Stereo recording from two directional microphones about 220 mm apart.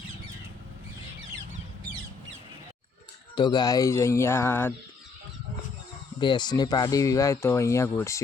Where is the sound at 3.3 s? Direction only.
20° left (ahead or behind).